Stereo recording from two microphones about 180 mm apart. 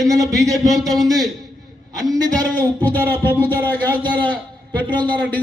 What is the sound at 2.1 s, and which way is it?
Speech, 20° right (ahead or behind).